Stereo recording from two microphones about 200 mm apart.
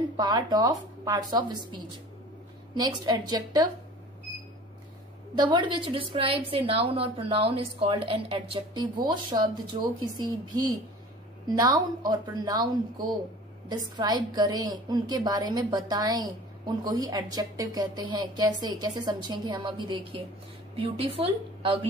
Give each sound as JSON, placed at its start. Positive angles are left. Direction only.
{"t": 0.2, "sound": "a woman's voice", "side_deg": -20}
{"t": 5.3, "sound": "a woman's voice", "side_deg": -20}